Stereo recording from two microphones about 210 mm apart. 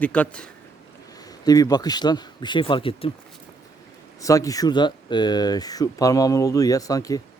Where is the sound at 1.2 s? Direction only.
15° left (ahead or behind).